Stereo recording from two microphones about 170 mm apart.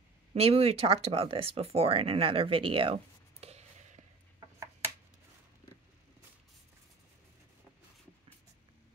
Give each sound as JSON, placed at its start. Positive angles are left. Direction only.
{"t": 0.3, "sound": "speech", "side_deg": -35}